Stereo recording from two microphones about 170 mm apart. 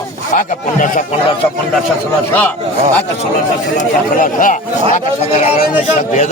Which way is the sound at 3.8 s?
50° left (ahead or behind).